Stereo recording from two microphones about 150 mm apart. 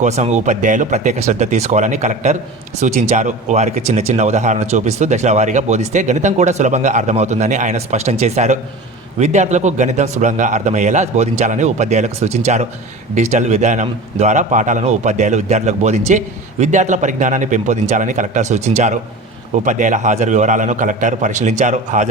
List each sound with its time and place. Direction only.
0.0 s a man's voice: 50° right (ahead or behind)